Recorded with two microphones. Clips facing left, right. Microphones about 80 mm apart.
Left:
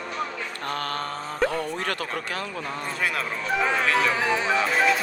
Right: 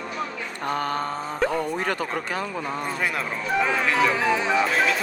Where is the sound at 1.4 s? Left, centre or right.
Centre.